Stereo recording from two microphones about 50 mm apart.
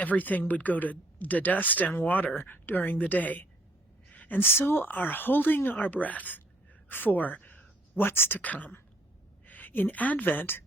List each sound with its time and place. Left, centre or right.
0.0 s speech: left
4.1 s a sound: left
4.4 s speech: left
4.9 s speech: left
8.4 s a woman's voice: left